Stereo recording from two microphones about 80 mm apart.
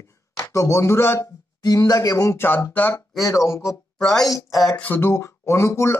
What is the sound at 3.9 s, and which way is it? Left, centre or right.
Speech, centre.